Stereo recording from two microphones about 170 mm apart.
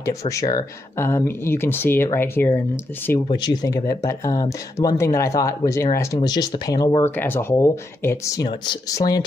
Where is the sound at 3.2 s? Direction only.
25° left (ahead or behind).